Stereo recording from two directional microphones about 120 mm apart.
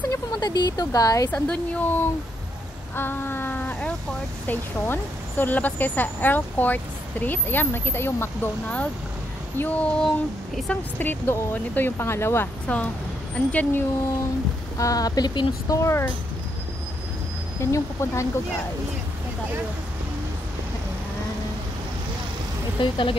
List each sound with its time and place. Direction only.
0.1 s speech: 35° left (ahead or behind)
1.3 s a woman's voice: 10° left (ahead or behind)
3.0 s a sound: 15° left (ahead or behind)
4.5 s a woman's voice: 15° left (ahead or behind)
11.0 s a woman's voice: 15° left (ahead or behind)
14.8 s speech: 30° left (ahead or behind)
17.6 s speech: 25° left (ahead or behind)
22.8 s speech: 45° left (ahead or behind)